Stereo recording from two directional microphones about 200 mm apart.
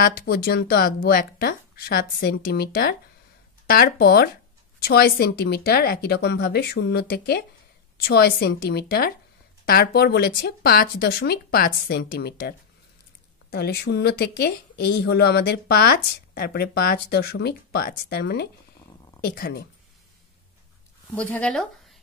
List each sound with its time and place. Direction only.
0.0 s speech: 50° left (ahead or behind)
21.1 s speech: 10° left (ahead or behind)